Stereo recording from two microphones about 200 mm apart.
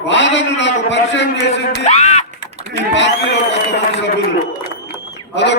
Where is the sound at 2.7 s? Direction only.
65° left (ahead or behind).